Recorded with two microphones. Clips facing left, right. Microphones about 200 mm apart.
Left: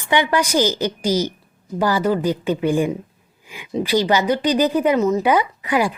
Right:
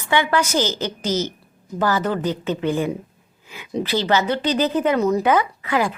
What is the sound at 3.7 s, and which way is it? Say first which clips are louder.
Speech: left 2 dB; 10° left (ahead or behind).